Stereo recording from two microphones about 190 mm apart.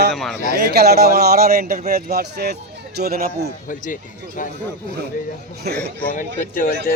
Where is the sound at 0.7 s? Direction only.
55° right (ahead or behind).